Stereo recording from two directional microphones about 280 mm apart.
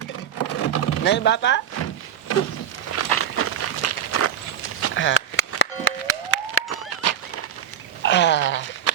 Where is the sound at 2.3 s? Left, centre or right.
Left.